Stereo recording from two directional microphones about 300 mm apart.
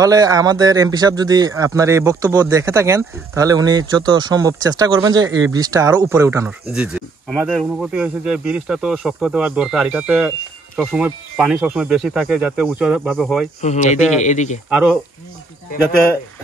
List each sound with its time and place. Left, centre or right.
0.0 s speech: centre
13.6 s speech: left
14.7 s speech: centre